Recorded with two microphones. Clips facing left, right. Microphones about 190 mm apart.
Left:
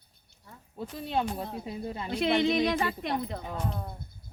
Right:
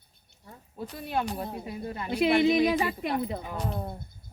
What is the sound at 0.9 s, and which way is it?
Speech, 25° left (ahead or behind).